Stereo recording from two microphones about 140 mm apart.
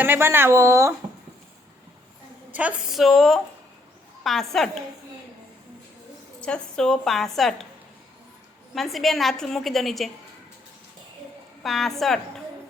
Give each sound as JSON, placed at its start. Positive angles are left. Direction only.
{"t": 0.0, "sound": "speech", "side_deg": -15}
{"t": 2.5, "sound": "a woman's voice", "side_deg": -10}
{"t": 6.4, "sound": "a woman's voice", "side_deg": 5}
{"t": 8.7, "sound": "a woman's voice", "side_deg": 0}
{"t": 11.6, "sound": "a woman's voice", "side_deg": 0}